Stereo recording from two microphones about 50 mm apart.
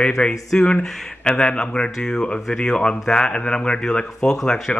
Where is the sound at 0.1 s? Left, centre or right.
Centre.